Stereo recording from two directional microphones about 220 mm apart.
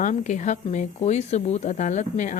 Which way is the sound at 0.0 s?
35° left (ahead or behind).